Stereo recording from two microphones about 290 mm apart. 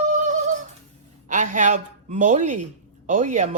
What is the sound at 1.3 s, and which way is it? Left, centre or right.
A woman's voice, right.